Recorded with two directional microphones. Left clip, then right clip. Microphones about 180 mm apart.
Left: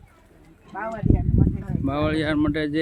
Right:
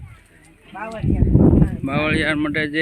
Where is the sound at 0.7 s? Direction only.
30° right (ahead or behind).